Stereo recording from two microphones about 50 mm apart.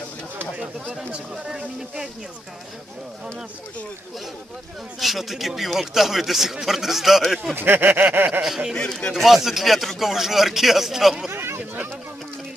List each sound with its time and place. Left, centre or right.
0.9 s speech: centre
4.9 s speech: centre
7.5 s a sound: right
8.3 s speech: centre
8.7 s speech: centre
9.1 s speech: centre
11.3 s speech: right